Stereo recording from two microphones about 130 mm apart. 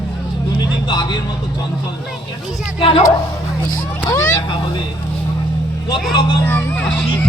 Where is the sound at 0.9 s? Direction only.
35° left (ahead or behind).